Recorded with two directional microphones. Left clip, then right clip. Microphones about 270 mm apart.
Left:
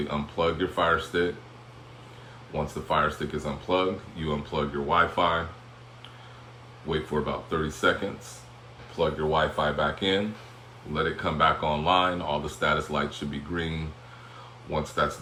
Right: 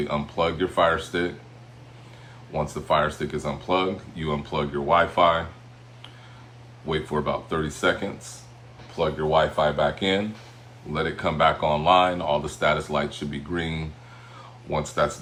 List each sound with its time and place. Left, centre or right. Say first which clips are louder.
0.1 s speech: even; right
2.5 s speech: right 5 dB; right
6.8 s speech: right 3 dB; right